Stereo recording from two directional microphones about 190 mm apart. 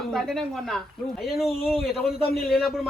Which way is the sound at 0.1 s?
Centre (ahead or behind).